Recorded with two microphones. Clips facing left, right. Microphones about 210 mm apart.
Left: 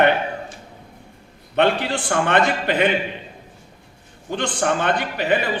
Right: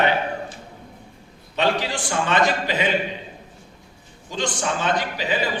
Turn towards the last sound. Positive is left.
turn(degrees=60)  # may be behind; listen again after turning